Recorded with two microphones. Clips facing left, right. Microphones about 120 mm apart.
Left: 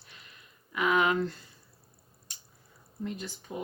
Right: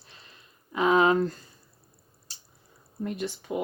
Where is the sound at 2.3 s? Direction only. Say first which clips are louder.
Right 1 dB; 30° right (ahead or behind).